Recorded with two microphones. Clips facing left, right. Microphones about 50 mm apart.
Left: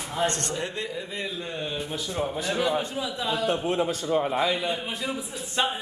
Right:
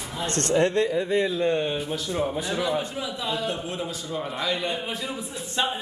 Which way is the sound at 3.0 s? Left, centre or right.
Centre.